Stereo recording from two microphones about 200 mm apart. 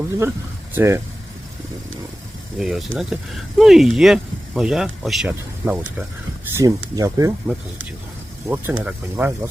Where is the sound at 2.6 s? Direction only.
Centre (ahead or behind).